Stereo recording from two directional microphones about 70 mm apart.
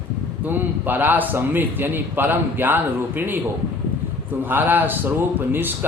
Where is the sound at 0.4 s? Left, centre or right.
Right.